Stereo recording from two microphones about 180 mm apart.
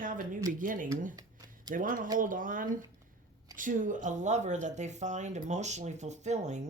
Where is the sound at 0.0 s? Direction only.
50° right (ahead or behind).